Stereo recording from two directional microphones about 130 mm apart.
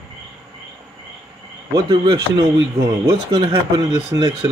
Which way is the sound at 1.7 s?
30° right (ahead or behind).